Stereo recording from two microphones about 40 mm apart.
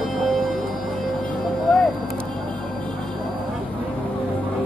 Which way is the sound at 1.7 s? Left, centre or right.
Left.